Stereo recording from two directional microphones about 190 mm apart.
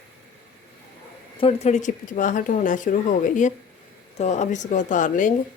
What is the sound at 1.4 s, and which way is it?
Speech, 35° left (ahead or behind).